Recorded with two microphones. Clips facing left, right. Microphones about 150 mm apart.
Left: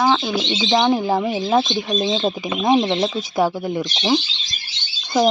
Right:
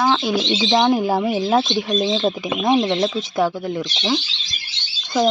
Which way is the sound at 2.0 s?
10° left (ahead or behind).